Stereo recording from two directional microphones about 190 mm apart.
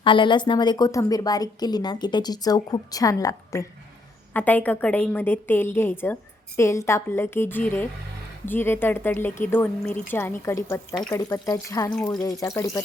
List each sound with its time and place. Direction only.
0.0 s a woman's voice: 25° left (ahead or behind)